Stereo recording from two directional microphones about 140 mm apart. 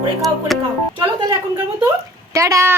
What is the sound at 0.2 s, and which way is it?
Speech, centre (ahead or behind).